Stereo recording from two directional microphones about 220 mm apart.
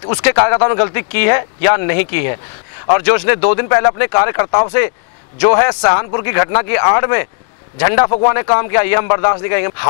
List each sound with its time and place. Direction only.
0.2 s speech: 15° left (ahead or behind)